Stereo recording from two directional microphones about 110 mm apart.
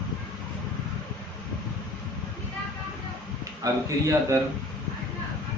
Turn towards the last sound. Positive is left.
turn(degrees=-30)  # may be behind; listen again after turning